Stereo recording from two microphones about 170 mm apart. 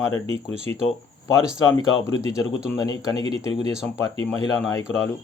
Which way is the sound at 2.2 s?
20° left (ahead or behind).